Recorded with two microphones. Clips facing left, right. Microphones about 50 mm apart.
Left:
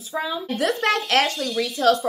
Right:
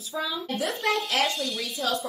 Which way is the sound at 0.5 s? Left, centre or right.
Left.